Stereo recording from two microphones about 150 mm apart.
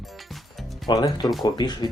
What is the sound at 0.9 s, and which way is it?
Speech, 30° left (ahead or behind).